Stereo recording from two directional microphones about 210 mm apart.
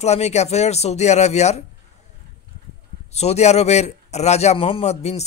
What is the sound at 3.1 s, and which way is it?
Speech, 30° left (ahead or behind).